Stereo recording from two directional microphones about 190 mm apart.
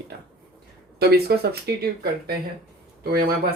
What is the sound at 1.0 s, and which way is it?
Speech, 55° right (ahead or behind).